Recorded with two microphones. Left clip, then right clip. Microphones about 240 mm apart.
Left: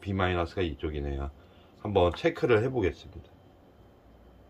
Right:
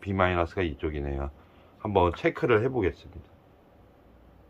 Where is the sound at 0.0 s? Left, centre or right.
Centre.